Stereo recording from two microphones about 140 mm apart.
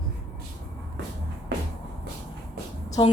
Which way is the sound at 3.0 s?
35° left (ahead or behind).